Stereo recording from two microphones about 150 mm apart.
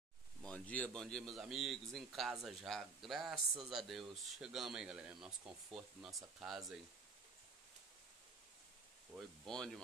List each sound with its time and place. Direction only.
0.4 s speech: 10° left (ahead or behind)
9.1 s speech: centre (ahead or behind)